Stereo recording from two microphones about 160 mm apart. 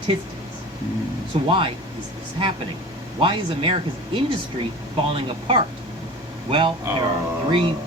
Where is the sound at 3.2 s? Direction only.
30° right (ahead or behind).